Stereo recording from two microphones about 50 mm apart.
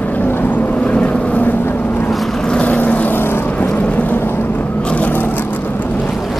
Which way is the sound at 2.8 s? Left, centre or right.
Left.